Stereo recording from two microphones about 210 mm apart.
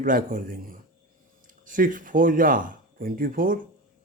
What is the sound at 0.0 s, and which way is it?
Speech, 40° right (ahead or behind).